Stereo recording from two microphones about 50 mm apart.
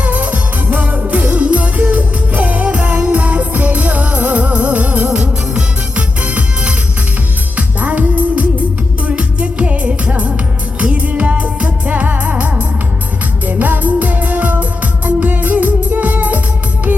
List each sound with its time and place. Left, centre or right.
0.0 s music: right